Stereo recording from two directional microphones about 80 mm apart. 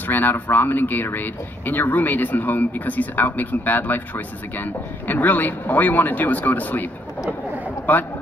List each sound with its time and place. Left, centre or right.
0.0 s speech: left
7.9 s speech: left